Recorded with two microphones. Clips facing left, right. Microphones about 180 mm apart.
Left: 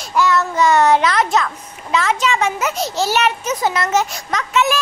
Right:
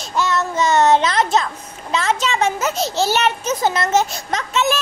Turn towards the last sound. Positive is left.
turn(degrees=-25)  # may be behind; listen again after turning